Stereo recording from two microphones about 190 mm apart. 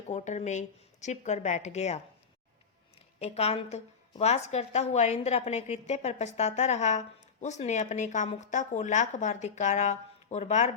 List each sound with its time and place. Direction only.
0.1 s speech: 40° left (ahead or behind)
3.2 s speech: 35° left (ahead or behind)